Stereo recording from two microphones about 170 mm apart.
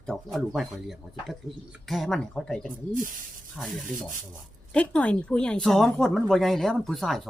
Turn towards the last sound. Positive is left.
turn(degrees=0)  # may be behind; listen again after turning